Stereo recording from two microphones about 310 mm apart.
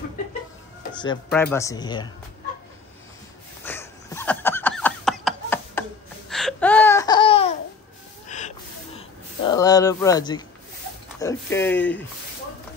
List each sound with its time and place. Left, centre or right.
0.9 s speech: centre
3.6 s a sound: centre
11.1 s speech: centre